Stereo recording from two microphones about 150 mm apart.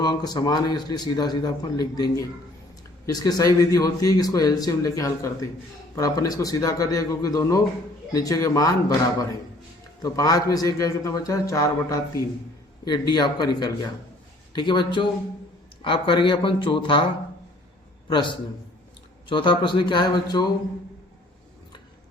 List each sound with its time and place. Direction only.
0.0 s a man's voice: 25° left (ahead or behind)
10.0 s a man's voice: 25° left (ahead or behind)
18.1 s speech: 35° left (ahead or behind)